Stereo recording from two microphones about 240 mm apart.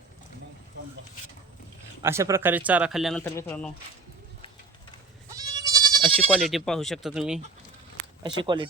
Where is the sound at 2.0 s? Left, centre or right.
Centre.